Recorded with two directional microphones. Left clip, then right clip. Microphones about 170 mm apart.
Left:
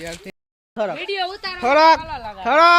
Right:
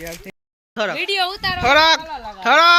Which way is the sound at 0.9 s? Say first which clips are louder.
Right 4 dB; 90° right.